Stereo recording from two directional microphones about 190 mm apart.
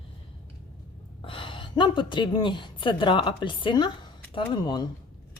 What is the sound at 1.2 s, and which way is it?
Speech, 25° left (ahead or behind).